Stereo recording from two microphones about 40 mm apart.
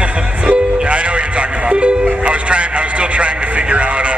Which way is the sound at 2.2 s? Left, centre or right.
Right.